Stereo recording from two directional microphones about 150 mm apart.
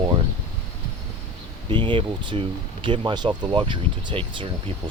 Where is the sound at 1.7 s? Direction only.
35° right (ahead or behind).